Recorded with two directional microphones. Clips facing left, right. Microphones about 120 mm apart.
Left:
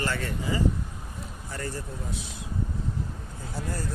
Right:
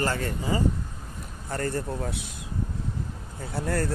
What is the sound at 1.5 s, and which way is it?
Speech, 55° right (ahead or behind).